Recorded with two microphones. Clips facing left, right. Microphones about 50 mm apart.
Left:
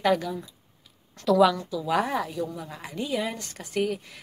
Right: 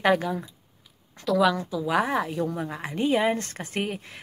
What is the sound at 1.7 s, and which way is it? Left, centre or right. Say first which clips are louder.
Speech: right 1 dB; centre.